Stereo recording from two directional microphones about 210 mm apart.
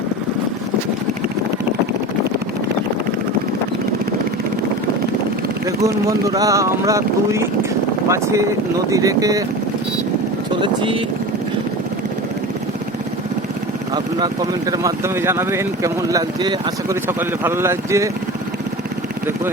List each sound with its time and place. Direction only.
5.6 s speech: 15° right (ahead or behind)
10.5 s speech: 25° right (ahead or behind)
14.7 s speech: 15° right (ahead or behind)